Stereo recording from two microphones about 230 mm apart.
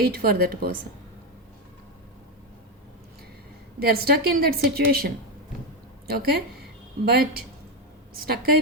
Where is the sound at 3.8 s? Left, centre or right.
Right.